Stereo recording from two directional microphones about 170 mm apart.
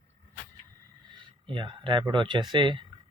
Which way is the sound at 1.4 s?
30° right (ahead or behind).